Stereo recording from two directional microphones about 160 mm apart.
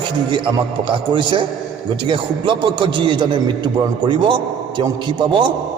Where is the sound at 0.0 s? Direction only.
30° right (ahead or behind).